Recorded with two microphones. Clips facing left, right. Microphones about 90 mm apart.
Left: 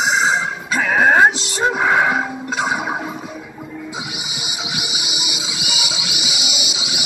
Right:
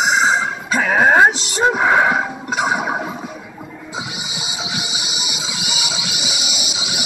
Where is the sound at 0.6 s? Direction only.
5° right (ahead or behind).